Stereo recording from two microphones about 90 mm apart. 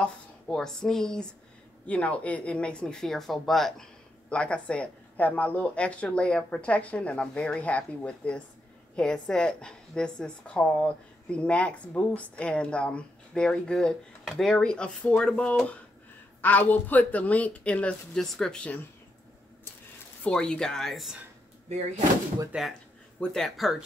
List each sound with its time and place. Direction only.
0.0 s a woman's voice: 5° left (ahead or behind)
20.2 s speech: 10° left (ahead or behind)
22.5 s speech: 10° right (ahead or behind)
23.2 s speech: 5° left (ahead or behind)